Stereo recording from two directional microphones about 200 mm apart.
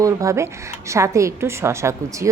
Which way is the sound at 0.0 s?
15° right (ahead or behind).